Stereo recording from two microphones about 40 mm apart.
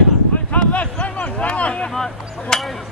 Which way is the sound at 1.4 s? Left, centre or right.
Left.